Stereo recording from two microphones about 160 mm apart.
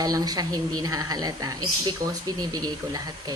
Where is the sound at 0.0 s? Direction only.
25° right (ahead or behind).